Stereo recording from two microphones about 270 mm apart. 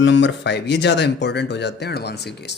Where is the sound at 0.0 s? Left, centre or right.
Left.